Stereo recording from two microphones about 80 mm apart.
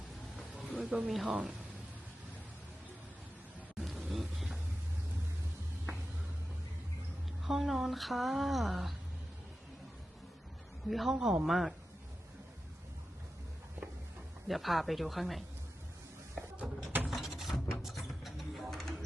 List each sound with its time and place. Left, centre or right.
1.0 s speech: centre
1.3 s a woman's voice: centre
3.8 s a sound: centre
7.4 s speech: centre
10.8 s speech: centre
14.4 s speech: centre
16.3 s a sound: right
17.1 s mechanisms: centre
17.8 s a sound: centre